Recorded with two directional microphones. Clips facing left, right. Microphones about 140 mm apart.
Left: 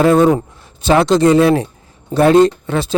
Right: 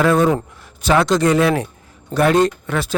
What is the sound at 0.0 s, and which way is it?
Speech, 30° left (ahead or behind).